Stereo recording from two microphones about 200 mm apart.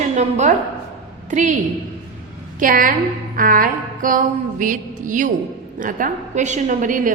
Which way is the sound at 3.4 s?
45° right (ahead or behind).